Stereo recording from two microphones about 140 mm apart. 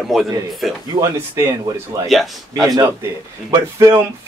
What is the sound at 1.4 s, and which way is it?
Speech, 20° right (ahead or behind).